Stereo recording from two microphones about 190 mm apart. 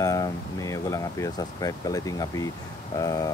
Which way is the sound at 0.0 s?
20° left (ahead or behind).